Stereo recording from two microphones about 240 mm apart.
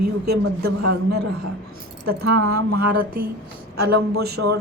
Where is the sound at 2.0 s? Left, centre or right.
Right.